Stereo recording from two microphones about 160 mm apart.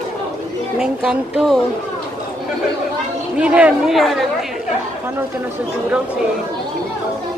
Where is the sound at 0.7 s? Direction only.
5° right (ahead or behind).